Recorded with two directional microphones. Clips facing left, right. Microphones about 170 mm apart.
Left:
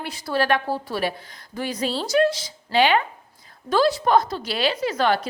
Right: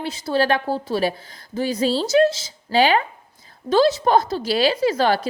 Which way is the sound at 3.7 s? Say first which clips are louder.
Right 3 dB; 25° right (ahead or behind).